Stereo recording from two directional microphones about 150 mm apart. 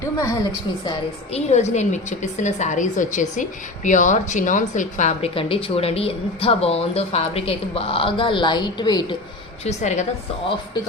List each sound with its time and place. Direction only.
0.9 s a woman's voice: 45° left (ahead or behind)
5.3 s a woman's voice: 35° left (ahead or behind)
9.6 s a woman's voice: 50° left (ahead or behind)